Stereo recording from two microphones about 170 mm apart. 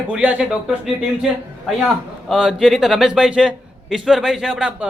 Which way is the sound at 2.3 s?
Centre (ahead or behind).